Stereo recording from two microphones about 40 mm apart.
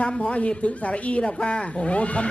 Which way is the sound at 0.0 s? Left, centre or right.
Left.